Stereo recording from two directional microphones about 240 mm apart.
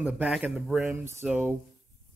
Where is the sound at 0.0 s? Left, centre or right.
Centre.